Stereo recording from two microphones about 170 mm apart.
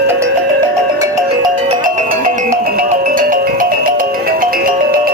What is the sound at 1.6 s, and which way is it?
Music, 50° right (ahead or behind).